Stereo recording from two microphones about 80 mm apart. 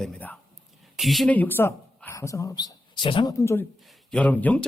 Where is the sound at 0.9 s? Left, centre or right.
Centre.